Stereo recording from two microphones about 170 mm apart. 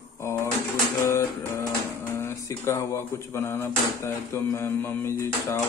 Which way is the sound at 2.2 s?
15° left (ahead or behind).